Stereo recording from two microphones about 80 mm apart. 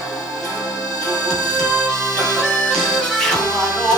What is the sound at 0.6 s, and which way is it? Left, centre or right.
Music, left.